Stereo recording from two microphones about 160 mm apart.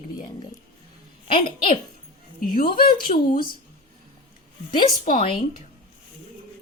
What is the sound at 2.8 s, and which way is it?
Speech, 65° left (ahead or behind).